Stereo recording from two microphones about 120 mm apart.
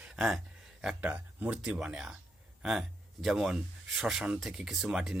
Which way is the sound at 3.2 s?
5° right (ahead or behind).